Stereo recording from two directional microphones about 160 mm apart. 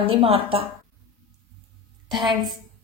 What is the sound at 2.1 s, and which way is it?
Speech, centre (ahead or behind).